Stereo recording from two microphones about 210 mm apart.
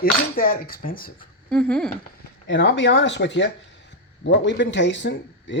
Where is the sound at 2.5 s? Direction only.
55° left (ahead or behind).